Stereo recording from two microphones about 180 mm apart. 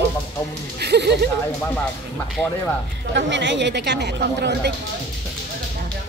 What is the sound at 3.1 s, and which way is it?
Speech, 75° right (ahead or behind).